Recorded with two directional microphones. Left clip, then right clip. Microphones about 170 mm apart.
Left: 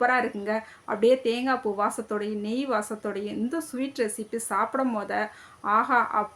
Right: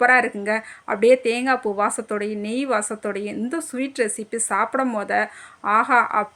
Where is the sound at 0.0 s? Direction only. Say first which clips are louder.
Right 7 dB; 30° right (ahead or behind).